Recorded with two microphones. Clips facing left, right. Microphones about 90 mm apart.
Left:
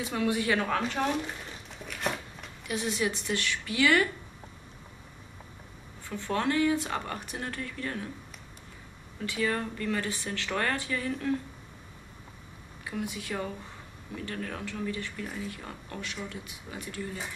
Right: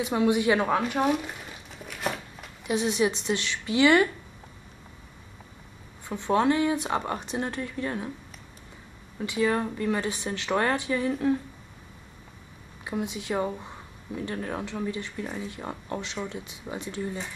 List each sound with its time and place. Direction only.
0.0 s speech: 20° right (ahead or behind); by 2.5 s 5° right (ahead or behind)
2.6 s speech: 20° right (ahead or behind)
6.0 s speech: 20° right (ahead or behind)
9.2 s speech: 20° right (ahead or behind)
12.8 s speech: 20° right (ahead or behind)